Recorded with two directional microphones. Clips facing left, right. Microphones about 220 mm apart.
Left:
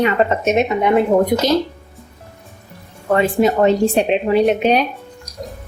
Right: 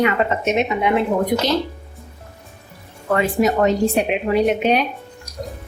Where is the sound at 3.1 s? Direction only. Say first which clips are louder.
Left 3 dB; 30° left (ahead or behind).